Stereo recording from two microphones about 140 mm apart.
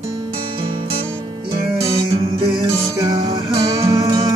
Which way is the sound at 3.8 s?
25° right (ahead or behind).